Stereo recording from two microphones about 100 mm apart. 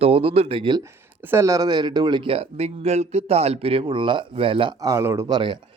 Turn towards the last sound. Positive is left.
turn(degrees=-50)  # may be behind; listen again after turning